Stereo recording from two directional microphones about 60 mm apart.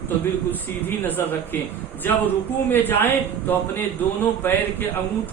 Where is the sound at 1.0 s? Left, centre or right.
Left.